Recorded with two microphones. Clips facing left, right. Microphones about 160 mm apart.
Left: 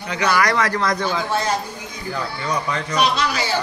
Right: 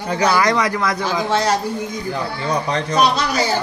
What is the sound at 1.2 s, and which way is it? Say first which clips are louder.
Speech: right 4 dB; 80° right.